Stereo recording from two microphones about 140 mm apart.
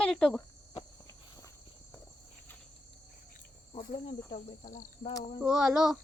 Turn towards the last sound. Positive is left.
turn(degrees=-5)  # may be behind; listen again after turning